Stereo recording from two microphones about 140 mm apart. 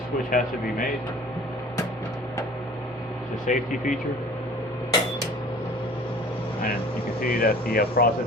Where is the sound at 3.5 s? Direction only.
60° left (ahead or behind).